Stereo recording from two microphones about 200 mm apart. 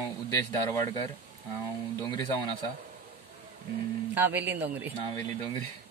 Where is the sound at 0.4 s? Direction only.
20° left (ahead or behind).